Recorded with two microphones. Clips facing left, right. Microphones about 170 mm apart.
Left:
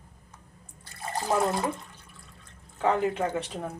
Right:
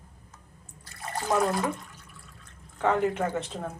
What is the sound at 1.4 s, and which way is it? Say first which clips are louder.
Speech: even; 25° left (ahead or behind).